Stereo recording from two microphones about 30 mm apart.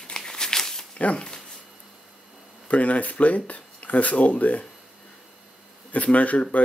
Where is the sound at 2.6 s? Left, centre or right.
Left.